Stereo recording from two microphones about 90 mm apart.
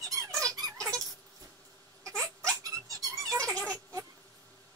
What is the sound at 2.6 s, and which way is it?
Squeak, 40° right (ahead or behind).